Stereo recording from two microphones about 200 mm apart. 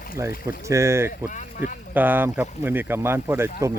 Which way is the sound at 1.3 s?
40° left (ahead or behind).